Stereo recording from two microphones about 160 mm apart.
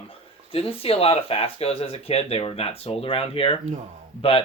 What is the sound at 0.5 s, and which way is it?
Speech, 35° left (ahead or behind).